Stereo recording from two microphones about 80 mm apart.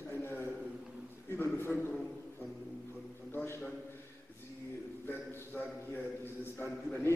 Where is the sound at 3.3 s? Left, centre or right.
Left.